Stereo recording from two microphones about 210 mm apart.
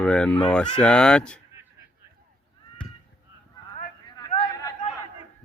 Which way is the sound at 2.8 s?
5° left (ahead or behind).